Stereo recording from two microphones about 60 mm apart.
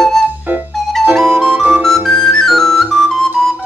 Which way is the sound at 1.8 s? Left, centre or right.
Centre.